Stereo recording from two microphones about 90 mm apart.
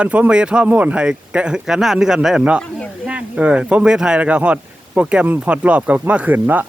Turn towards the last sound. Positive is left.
turn(degrees=-20)  # may be behind; listen again after turning